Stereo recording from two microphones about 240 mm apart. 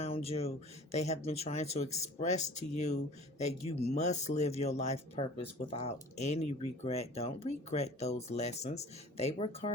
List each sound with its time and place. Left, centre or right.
0.0 s speech: left